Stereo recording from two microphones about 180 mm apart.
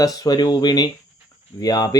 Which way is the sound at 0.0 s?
20° left (ahead or behind).